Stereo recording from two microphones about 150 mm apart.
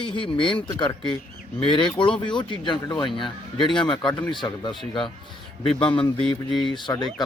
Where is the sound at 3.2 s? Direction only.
Centre (ahead or behind).